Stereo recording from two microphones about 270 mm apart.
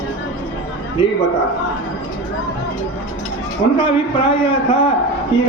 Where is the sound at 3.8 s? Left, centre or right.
Centre.